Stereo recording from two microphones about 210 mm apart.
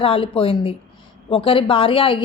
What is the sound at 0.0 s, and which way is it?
A woman's voice, 25° left (ahead or behind).